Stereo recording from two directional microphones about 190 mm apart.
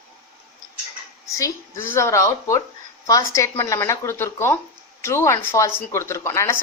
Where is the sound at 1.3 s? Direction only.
15° left (ahead or behind).